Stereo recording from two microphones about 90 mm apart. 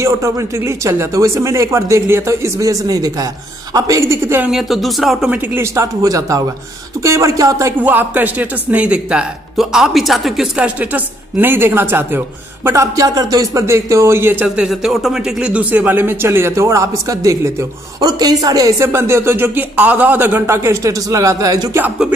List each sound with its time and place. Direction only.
0.0 s speech: 35° right (ahead or behind)
4.5 s speech: centre (ahead or behind)
5.6 s speech: 35° right (ahead or behind)
7.8 s speech: 20° right (ahead or behind)
12.6 s speech: 35° right (ahead or behind); by 14.7 s 20° right (ahead or behind)
14.7 s speech: centre (ahead or behind); by 21.6 s 40° right (ahead or behind)